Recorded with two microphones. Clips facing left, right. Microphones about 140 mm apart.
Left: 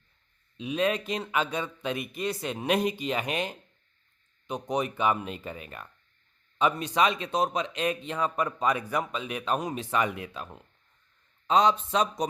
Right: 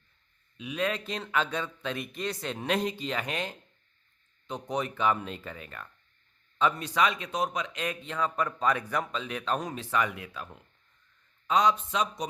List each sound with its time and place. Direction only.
0.5 s a man's voice: 25° left (ahead or behind)